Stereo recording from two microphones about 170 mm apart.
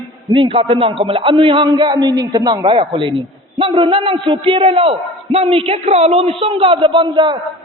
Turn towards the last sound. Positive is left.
turn(degrees=-25)  # may be behind; listen again after turning